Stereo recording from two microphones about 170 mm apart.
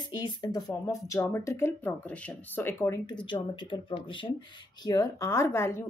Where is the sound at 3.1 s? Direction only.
25° left (ahead or behind).